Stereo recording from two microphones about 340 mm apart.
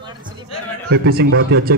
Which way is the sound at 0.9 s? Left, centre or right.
Right.